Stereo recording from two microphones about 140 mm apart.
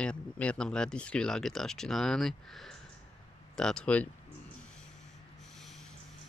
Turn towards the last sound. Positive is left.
turn(degrees=0)  # may be behind; listen again after turning